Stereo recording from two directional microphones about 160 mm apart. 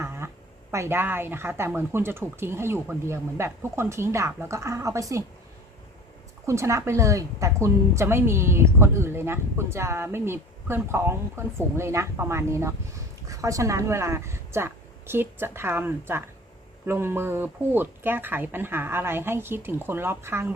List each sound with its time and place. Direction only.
0.0 s a sound: 15° right (ahead or behind)
0.7 s a woman's voice: 15° right (ahead or behind)
6.4 s a woman's voice: 15° right (ahead or behind)